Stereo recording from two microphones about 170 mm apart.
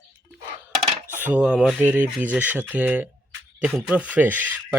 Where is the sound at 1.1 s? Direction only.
10° right (ahead or behind).